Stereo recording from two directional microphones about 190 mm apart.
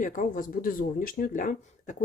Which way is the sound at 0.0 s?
45° left (ahead or behind).